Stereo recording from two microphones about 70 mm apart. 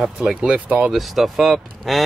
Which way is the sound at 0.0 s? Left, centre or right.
Centre.